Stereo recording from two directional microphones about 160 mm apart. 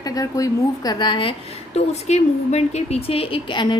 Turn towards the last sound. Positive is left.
turn(degrees=30)  # may be behind; listen again after turning